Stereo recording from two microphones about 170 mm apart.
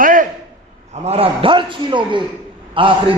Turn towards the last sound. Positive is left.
turn(degrees=-30)  # may be behind; listen again after turning